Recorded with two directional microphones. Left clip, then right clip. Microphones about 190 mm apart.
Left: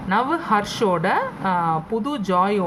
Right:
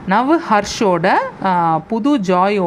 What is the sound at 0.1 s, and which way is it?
A woman's voice, 40° right (ahead or behind).